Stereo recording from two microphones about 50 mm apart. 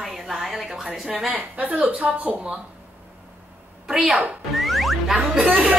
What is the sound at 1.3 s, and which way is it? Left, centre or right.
Speech, right.